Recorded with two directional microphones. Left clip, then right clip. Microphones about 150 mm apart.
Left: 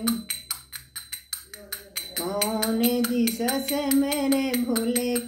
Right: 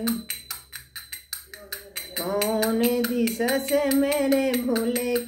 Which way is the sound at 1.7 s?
15° left (ahead or behind).